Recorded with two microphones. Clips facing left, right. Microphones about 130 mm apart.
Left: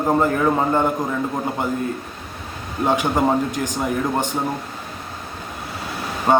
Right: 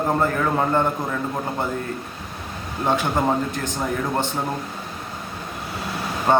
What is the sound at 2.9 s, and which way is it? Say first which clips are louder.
A man's voice: left 2 dB; 15° left (ahead or behind).